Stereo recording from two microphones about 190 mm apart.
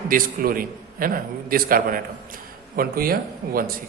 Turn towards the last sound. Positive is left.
turn(degrees=-50)  # may be behind; listen again after turning